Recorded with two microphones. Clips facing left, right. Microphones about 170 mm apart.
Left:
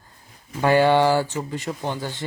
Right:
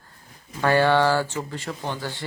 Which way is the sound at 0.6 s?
15° left (ahead or behind).